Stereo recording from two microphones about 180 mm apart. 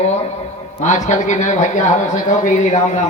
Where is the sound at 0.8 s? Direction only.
40° left (ahead or behind).